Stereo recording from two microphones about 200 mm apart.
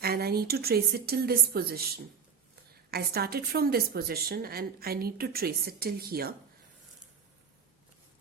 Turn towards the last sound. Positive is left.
turn(degrees=-50)  # may be behind; listen again after turning